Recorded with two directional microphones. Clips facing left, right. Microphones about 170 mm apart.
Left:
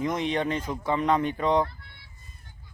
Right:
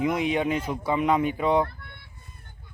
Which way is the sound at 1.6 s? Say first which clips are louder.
Right 1 dB; 55° right (ahead or behind).